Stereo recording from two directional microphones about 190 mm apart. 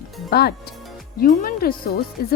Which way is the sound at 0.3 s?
55° left (ahead or behind).